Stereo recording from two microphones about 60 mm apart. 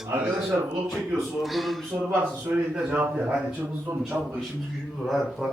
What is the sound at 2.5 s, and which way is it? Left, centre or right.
Speech, centre.